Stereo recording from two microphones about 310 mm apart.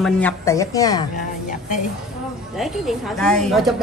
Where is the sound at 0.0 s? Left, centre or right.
Centre.